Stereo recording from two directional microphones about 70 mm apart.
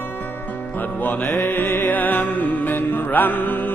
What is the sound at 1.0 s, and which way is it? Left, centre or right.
Music, left.